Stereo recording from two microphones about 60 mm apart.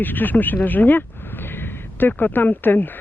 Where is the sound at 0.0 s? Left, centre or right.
Left.